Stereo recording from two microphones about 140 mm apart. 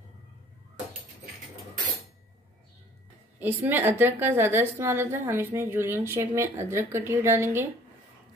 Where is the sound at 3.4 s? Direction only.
15° right (ahead or behind).